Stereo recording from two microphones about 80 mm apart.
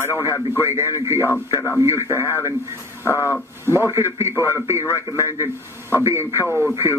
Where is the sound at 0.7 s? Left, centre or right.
Right.